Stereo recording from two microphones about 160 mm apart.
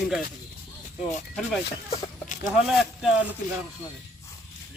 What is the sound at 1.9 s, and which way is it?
Chicken, 50° left (ahead or behind).